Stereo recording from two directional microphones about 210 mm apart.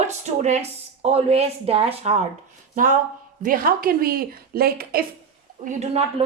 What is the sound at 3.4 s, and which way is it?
A woman's voice, 40° right (ahead or behind).